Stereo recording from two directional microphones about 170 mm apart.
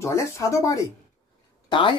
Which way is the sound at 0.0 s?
15° left (ahead or behind).